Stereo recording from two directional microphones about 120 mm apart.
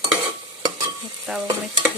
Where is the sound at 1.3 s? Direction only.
5° right (ahead or behind).